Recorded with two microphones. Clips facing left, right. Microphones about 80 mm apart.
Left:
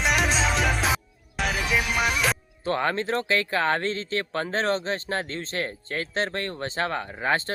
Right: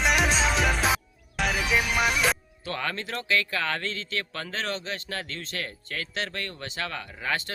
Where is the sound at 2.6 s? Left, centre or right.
Left.